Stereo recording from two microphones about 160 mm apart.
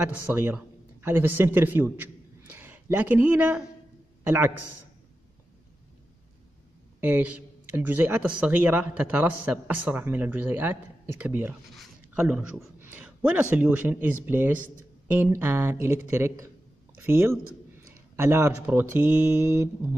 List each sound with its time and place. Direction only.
0.0 s a man's voice: 10° right (ahead or behind)
7.0 s speech: 10° right (ahead or behind)